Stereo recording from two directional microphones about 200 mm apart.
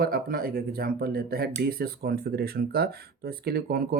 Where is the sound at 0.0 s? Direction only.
50° right (ahead or behind).